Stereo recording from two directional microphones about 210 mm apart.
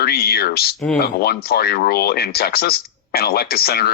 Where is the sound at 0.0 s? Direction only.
50° left (ahead or behind).